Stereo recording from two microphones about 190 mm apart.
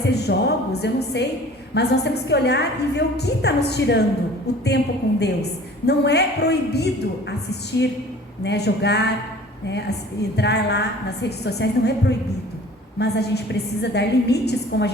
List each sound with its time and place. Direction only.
0.1 s a woman's voice: 60° left (ahead or behind)